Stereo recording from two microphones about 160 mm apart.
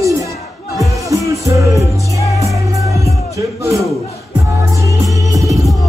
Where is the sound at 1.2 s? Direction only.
20° right (ahead or behind).